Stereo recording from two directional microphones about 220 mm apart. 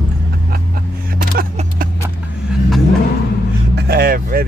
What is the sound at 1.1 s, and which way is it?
Vehicle, 40° right (ahead or behind).